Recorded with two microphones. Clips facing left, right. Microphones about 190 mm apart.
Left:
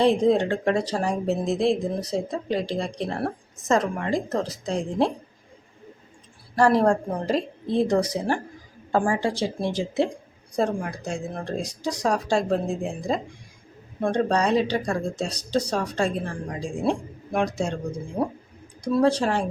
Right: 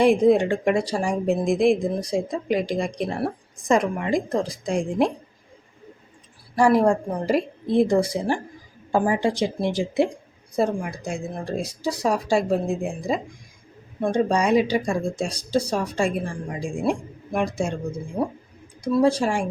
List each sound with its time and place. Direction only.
0.0 s speech: 10° right (ahead or behind)
6.6 s speech: 10° right (ahead or behind)
18.9 s speech: 5° right (ahead or behind)